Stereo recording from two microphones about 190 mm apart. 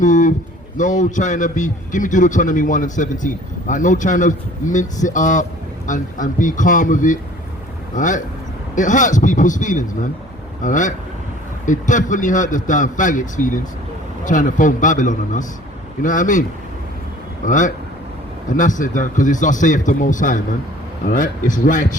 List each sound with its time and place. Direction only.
0.0 s a man's voice: 40° left (ahead or behind)
17.4 s a man's voice: 40° left (ahead or behind)